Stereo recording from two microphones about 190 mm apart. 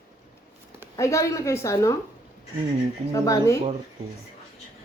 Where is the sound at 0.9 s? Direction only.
15° left (ahead or behind).